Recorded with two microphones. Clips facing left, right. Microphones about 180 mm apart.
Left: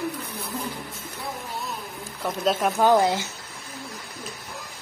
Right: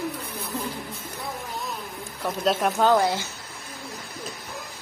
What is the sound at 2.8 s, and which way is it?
Speech, 15° left (ahead or behind).